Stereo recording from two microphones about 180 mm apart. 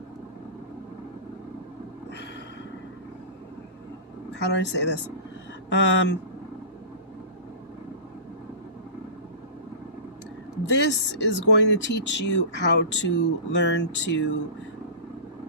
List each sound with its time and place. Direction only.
4.5 s speech: 80° left
5.6 s speech: 90° left
10.7 s speech: 75° left (ahead or behind)